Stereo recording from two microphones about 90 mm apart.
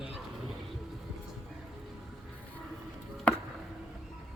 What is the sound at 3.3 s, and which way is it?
Chop, 15° left (ahead or behind).